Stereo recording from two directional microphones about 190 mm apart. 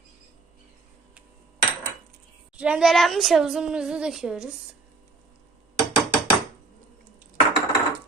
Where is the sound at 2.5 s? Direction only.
5° right (ahead or behind).